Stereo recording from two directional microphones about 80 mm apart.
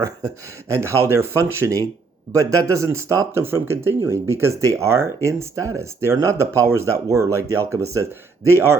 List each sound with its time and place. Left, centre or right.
0.7 s speech: right